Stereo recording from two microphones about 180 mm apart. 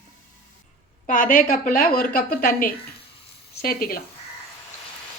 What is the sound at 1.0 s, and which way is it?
A woman's voice, 50° left (ahead or behind).